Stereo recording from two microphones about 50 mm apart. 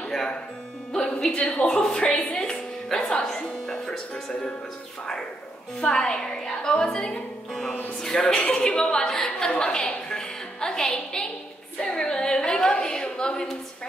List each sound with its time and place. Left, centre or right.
0.9 s music: centre
1.3 s a woman's voice: left
1.7 s a woman's voice: centre
2.3 s music: centre
5.8 s a woman's voice: centre